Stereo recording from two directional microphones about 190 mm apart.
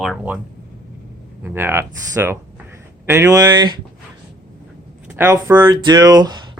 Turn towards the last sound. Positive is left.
turn(degrees=-20)  # may be behind; listen again after turning